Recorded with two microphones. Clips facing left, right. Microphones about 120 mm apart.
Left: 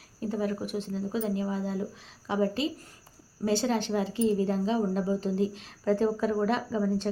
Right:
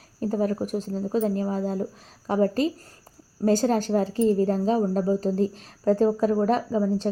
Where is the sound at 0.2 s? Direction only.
40° right (ahead or behind).